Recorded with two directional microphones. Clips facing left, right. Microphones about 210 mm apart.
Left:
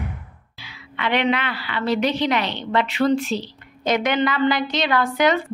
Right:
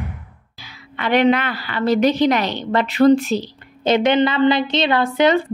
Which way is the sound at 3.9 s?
25° right (ahead or behind).